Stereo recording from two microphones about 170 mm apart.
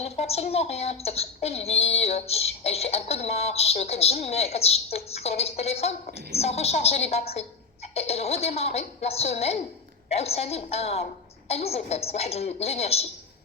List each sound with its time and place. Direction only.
0.0 s music: 40° left (ahead or behind)